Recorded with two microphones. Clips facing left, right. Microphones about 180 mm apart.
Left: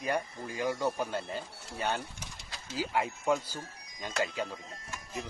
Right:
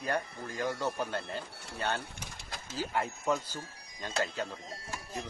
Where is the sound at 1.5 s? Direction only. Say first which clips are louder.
Left 1 dB; 65° right (ahead or behind).